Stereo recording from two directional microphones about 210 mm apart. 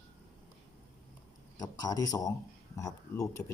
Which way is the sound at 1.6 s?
15° left (ahead or behind).